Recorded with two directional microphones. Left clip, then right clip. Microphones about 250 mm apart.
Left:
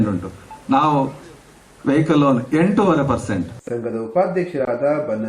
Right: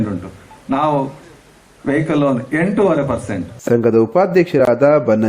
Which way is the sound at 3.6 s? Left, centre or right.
Right.